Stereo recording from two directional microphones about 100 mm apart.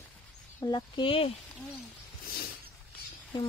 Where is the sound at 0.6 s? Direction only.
50° left (ahead or behind).